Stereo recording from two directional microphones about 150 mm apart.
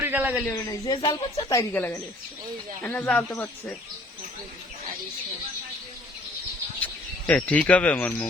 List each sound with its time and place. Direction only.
0.0 s a sound: 10° right (ahead or behind)
0.5 s speech: 25° left (ahead or behind)
1.7 s speech: 10° left (ahead or behind)
6.7 s cricket: 10° left (ahead or behind)
7.7 s speech: 10° left (ahead or behind)